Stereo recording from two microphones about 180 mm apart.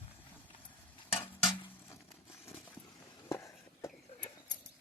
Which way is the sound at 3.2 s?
15° left (ahead or behind).